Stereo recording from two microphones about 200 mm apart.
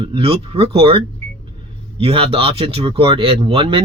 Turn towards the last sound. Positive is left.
turn(degrees=-25)  # may be behind; listen again after turning